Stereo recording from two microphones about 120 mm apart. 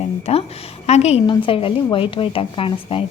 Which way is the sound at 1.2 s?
45° left (ahead or behind).